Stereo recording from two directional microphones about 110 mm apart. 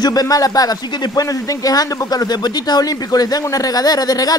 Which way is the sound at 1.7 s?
35° left (ahead or behind).